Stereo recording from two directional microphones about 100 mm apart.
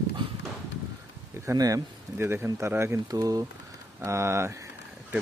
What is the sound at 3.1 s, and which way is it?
Speech, 35° right (ahead or behind).